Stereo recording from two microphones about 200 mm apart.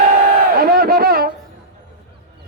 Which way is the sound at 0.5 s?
50° right (ahead or behind).